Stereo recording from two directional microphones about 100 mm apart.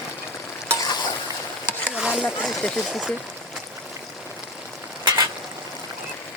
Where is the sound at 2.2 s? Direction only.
5° left (ahead or behind).